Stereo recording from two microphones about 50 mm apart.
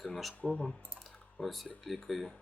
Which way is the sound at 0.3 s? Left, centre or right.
Left.